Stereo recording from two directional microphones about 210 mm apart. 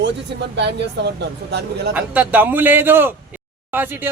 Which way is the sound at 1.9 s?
10° right (ahead or behind).